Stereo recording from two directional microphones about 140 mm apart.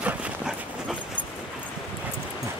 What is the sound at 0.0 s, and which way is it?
Dog, 10° right (ahead or behind).